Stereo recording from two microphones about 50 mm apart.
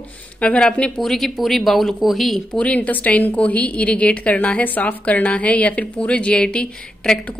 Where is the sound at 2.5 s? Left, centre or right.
Left.